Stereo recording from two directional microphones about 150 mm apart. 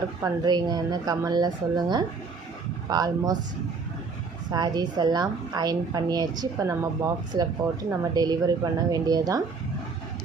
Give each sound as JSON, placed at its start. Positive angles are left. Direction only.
{"t": 0.2, "sound": "a woman's voice", "side_deg": -30}
{"t": 4.5, "sound": "a woman's voice", "side_deg": -30}